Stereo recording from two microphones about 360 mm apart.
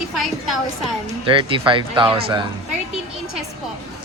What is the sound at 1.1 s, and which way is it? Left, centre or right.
Speech, centre.